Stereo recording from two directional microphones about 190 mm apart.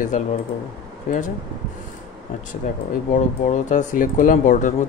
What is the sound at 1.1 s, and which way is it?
Speech, 45° left (ahead or behind).